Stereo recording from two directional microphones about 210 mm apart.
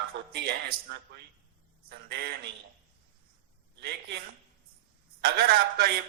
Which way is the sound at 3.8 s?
50° right (ahead or behind).